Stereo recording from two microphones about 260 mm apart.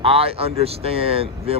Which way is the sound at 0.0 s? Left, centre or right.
Right.